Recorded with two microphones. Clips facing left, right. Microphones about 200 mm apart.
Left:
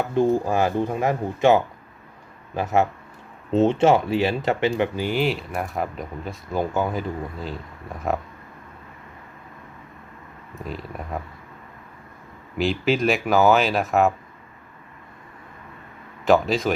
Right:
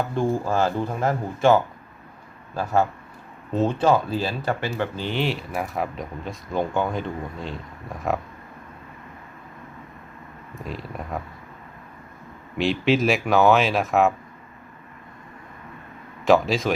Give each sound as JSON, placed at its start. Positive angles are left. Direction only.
{"t": 0.1, "sound": "speech", "side_deg": 20}
{"t": 10.5, "sound": "speech", "side_deg": 0}
{"t": 12.5, "sound": "speech", "side_deg": 0}
{"t": 16.2, "sound": "speech", "side_deg": 0}